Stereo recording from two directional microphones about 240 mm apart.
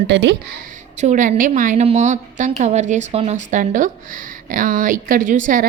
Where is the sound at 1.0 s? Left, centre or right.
Right.